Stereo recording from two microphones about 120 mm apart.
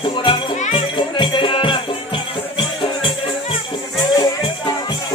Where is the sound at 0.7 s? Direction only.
45° left (ahead or behind).